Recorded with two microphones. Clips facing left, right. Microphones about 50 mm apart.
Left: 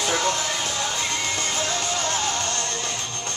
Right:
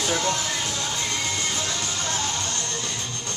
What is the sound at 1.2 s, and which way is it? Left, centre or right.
Music, left.